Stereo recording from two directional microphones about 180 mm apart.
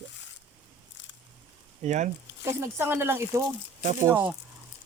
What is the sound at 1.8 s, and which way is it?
Speech, 40° right (ahead or behind).